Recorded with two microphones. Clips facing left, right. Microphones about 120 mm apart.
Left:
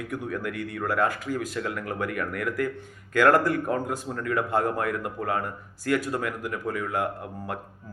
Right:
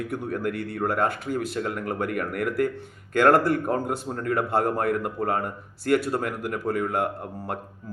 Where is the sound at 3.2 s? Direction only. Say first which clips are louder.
Right 1 dB; 30° right (ahead or behind).